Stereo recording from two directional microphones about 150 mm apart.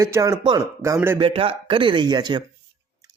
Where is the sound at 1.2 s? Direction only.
40° right (ahead or behind).